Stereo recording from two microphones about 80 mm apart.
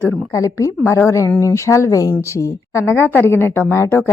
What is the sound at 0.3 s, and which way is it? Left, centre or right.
A woman's voice, left.